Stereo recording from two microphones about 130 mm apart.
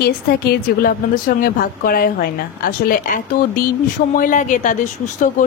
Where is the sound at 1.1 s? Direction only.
90° left.